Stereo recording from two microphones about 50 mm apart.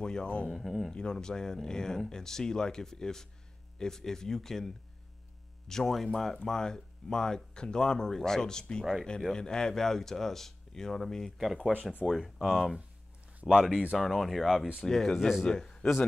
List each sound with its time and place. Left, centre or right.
0.0 s speech: centre
0.5 s speech: centre
11.3 s speech: centre